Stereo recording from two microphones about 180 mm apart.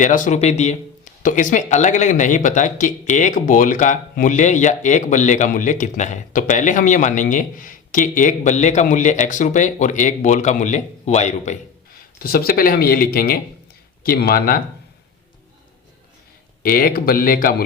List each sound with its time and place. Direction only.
0.0 s speech: 45° left (ahead or behind)
12.2 s speech: 55° left (ahead or behind)
16.6 s speech: 55° left (ahead or behind)